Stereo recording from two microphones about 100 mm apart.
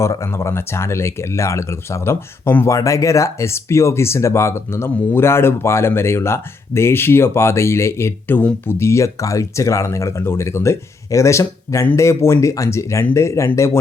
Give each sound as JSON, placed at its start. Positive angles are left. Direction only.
{"t": 0.0, "sound": "speech", "side_deg": 30}